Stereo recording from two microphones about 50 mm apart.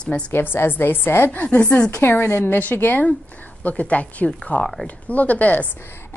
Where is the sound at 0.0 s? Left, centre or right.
Centre.